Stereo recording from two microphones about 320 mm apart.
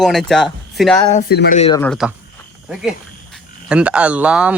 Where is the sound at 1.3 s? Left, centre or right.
Left.